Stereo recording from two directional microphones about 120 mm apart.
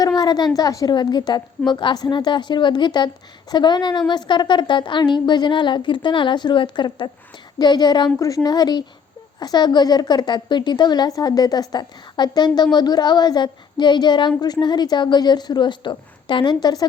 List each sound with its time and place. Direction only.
0.2 s speech: 35° left (ahead or behind)